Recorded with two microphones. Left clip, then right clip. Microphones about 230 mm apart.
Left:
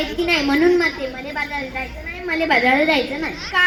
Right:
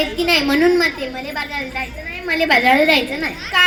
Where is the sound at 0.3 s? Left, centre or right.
Right.